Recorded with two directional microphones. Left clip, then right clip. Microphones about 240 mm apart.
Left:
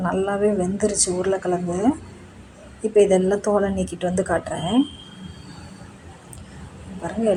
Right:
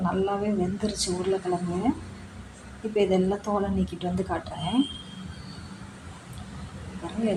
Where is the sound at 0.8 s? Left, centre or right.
Left.